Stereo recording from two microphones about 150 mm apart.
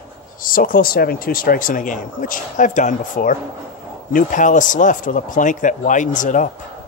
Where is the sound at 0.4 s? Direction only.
70° left (ahead or behind).